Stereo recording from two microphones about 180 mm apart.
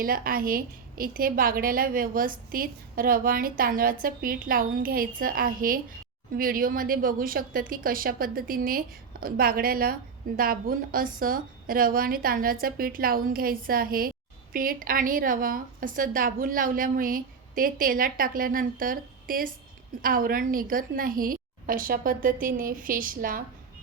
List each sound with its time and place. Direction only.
0.0 s a woman's voice: 55° right (ahead or behind)